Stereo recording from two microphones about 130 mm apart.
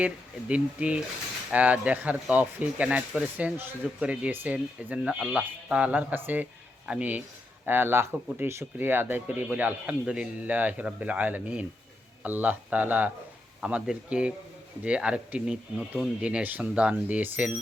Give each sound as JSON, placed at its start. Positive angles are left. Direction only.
{"t": 0.0, "sound": "speech", "side_deg": -10}